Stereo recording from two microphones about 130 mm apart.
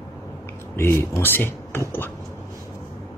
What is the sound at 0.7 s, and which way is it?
Speech, 20° left (ahead or behind).